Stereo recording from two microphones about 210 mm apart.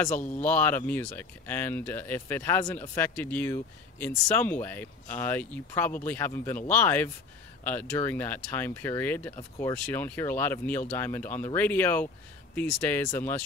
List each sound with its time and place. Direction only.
0.4 s speech: 10° left (ahead or behind)